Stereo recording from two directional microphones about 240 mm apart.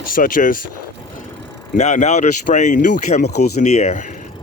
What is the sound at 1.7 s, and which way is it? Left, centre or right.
Speech, left.